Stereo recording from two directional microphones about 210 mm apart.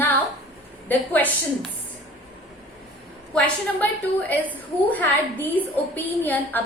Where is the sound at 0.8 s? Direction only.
10° left (ahead or behind).